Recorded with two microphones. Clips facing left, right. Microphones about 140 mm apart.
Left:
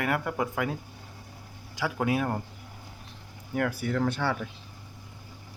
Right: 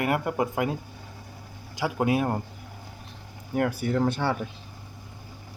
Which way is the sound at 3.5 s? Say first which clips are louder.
Right 3 dB; 20° right (ahead or behind).